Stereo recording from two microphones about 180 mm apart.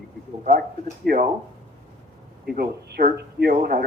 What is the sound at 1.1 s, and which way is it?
Speech, 60° right (ahead or behind).